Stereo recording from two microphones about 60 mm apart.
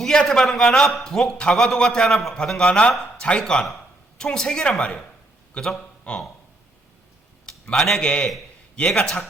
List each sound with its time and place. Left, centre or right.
0.0 s a man's voice: centre
2.1 s a man's voice: centre
2.4 s a man's voice: centre
7.4 s a man's voice: centre